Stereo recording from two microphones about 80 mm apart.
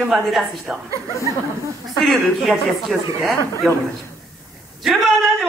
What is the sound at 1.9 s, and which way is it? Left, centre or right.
Speech, centre.